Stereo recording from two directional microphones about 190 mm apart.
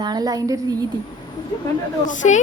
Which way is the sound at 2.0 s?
40° left (ahead or behind).